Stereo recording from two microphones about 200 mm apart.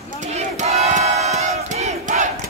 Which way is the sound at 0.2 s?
35° right (ahead or behind).